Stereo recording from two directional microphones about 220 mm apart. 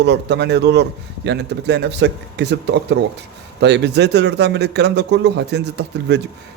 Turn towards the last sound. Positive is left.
turn(degrees=-50)  # may be behind; listen again after turning